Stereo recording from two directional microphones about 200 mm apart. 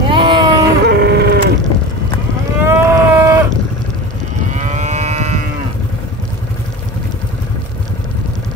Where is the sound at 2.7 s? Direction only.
15° right (ahead or behind).